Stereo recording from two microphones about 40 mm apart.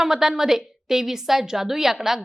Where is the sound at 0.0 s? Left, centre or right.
Centre.